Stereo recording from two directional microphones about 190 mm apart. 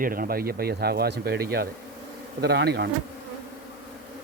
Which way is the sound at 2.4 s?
60° right (ahead or behind).